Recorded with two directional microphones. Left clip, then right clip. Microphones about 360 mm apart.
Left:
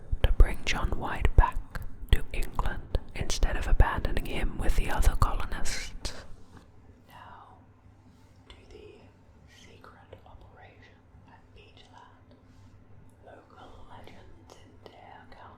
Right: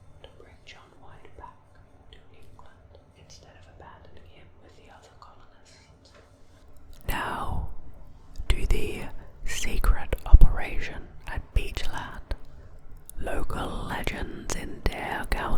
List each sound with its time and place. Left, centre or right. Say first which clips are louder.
0.2 s whispering: left 17 dB; left
7.1 s whispering: right 18 dB; right
8.4 s whispering: right 17 dB; right